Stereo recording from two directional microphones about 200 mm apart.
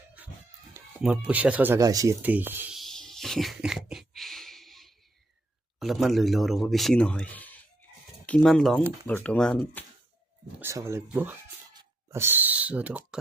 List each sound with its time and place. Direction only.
0.7 s speech: 5° right (ahead or behind)
2.8 s a sound: centre (ahead or behind)
5.8 s speech: centre (ahead or behind)
10.6 s speech: 15° right (ahead or behind)